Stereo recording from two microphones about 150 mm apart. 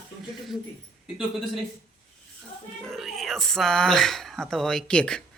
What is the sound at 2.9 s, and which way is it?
Speech, centre (ahead or behind).